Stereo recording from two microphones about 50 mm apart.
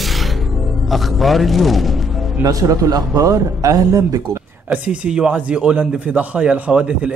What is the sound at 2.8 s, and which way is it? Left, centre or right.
Speech, right.